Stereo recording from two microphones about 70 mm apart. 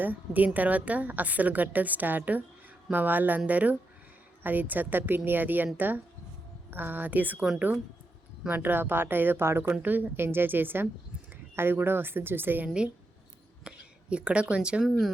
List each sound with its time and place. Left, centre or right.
0.0 s a woman's voice: right
8.4 s a woman's voice: right
13.7 s speech: centre
14.8 s speech: centre